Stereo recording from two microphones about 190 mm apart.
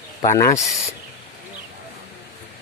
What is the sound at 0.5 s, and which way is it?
Speech, centre (ahead or behind).